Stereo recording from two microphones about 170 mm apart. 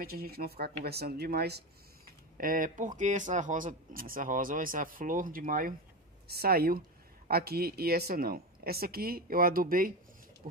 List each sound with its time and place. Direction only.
0.0 s speech: 65° right (ahead or behind)
2.0 s speech: 55° right (ahead or behind)
6.2 s speech: 65° right (ahead or behind)
10.4 s speech: 45° right (ahead or behind)